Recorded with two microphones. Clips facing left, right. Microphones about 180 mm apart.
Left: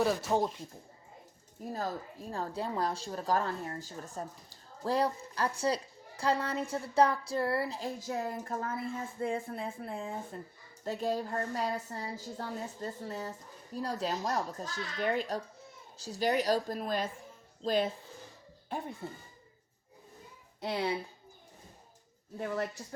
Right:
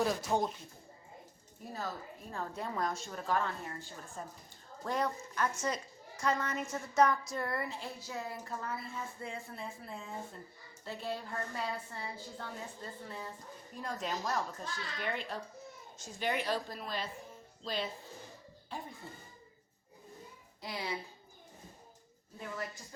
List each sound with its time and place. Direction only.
0.0 s speech: 5° left (ahead or behind)
2.3 s a woman's voice: 30° left (ahead or behind); by 10.1 s 55° left (ahead or behind)
10.8 s a woman's voice: 40° left (ahead or behind)
19.0 s speech: 65° left (ahead or behind)
20.6 s speech: 65° left (ahead or behind)
22.4 s speech: 65° left (ahead or behind)